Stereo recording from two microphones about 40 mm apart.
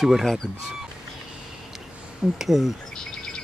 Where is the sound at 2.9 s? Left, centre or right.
Centre.